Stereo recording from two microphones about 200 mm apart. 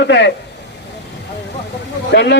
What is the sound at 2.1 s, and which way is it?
Speech, 60° left (ahead or behind).